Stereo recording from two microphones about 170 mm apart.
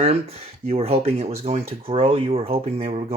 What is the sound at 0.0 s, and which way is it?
Speech, 35° right (ahead or behind).